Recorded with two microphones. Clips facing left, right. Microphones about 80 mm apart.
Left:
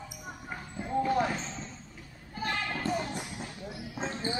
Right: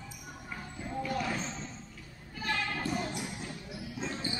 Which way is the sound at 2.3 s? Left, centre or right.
Left.